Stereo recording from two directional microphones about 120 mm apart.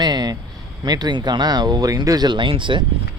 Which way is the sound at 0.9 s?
35° right (ahead or behind).